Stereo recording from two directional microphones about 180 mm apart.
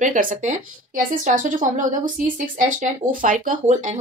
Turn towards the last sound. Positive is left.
turn(degrees=-45)  # may be behind; listen again after turning